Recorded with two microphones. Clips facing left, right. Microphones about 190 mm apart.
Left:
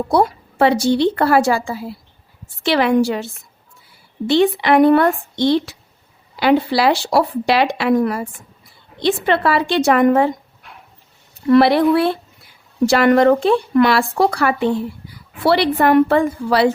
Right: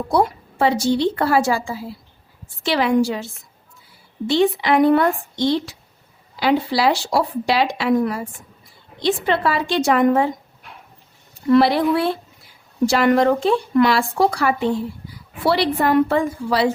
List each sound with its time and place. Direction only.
0.6 s speech: 65° left (ahead or behind)
4.3 s speech: 65° left (ahead or behind)
11.5 s speech: 65° left (ahead or behind)